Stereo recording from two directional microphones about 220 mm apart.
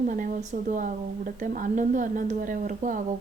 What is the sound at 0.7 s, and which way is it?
A woman's voice, 35° right (ahead or behind).